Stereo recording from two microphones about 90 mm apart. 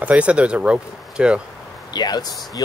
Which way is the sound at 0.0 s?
15° right (ahead or behind).